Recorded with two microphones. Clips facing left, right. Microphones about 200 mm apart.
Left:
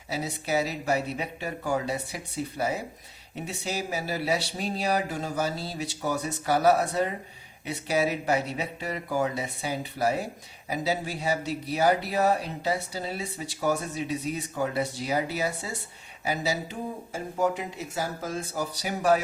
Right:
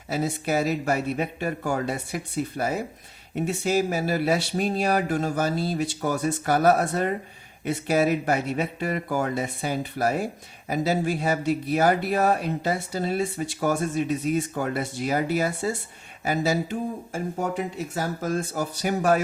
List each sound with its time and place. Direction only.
0.1 s speech: 50° right (ahead or behind)